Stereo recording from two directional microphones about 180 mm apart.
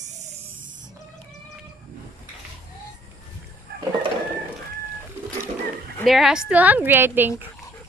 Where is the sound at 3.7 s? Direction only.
60° right (ahead or behind).